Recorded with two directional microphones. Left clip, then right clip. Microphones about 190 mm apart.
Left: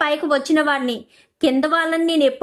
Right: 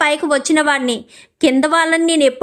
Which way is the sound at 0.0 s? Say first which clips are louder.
Right 4 dB; 10° right (ahead or behind).